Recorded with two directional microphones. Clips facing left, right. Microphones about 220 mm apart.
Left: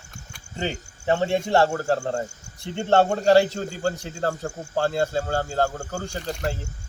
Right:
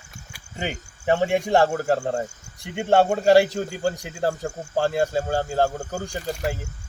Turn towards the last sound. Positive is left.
turn(degrees=-10)  # may be behind; listen again after turning